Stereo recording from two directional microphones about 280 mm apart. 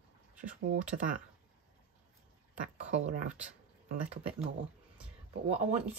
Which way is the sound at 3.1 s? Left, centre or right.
Right.